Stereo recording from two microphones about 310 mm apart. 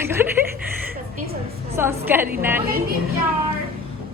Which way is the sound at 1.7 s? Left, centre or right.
Centre.